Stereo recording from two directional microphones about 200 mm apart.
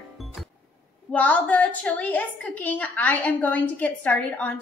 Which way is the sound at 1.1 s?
5° left (ahead or behind).